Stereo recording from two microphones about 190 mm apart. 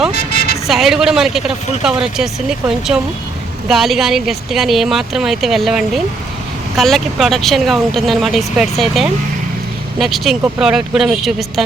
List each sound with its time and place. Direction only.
0.1 s vehicle: 55° left (ahead or behind)
0.7 s speech: centre (ahead or behind)